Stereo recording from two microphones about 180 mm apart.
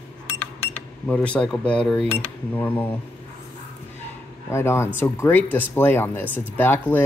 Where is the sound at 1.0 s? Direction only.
5° left (ahead or behind).